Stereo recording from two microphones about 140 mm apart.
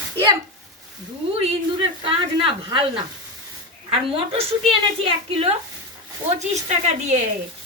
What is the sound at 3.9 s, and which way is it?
Speech, 40° right (ahead or behind).